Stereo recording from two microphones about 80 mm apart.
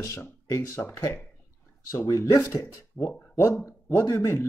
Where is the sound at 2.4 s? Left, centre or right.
Left.